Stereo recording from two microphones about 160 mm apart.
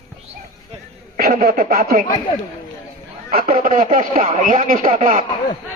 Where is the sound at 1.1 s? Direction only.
65° right (ahead or behind).